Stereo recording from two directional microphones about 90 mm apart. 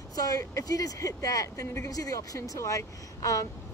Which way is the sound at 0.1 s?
45° left (ahead or behind).